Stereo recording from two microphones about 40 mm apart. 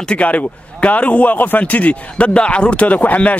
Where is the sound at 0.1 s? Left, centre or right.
Left.